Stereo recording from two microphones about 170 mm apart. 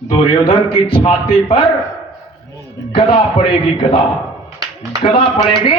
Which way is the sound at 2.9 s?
30° left (ahead or behind).